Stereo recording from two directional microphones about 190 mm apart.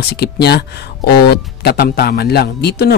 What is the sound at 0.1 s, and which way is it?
Speech, 60° left (ahead or behind).